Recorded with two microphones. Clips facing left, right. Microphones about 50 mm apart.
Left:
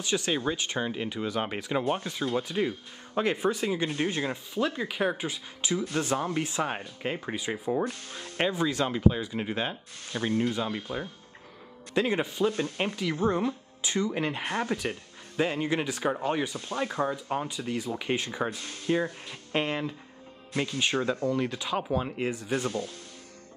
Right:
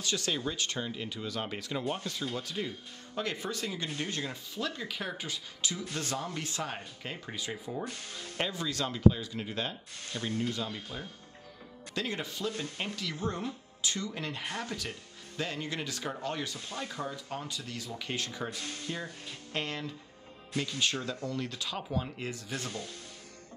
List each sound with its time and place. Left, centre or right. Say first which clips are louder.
0.0 s speech: left 5 dB; left
8.1 s speech: left 3 dB; centre
8.4 s speech: left 7 dB; left
10.2 s speech: left 6 dB; centre
10.5 s speech: left 6 dB; centre
16.5 s speech: left 7 dB; centre
17.1 s speech: left 8 dB; left
18.6 s speech: even; centre
19.5 s speech: left 7 dB; left
22.7 s speech: left 8 dB; centre